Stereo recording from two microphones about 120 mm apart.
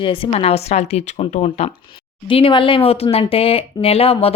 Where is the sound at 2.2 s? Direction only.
45° left (ahead or behind).